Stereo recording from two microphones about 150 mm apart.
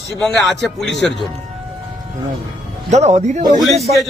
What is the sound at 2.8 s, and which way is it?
Speech, 50° right (ahead or behind).